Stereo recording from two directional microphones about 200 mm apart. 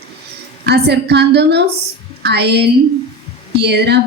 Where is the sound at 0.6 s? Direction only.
55° right (ahead or behind).